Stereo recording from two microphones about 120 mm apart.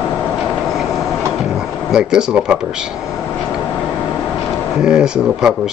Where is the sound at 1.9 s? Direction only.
5° right (ahead or behind).